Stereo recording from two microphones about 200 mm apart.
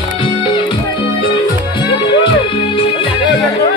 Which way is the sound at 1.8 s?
25° left (ahead or behind).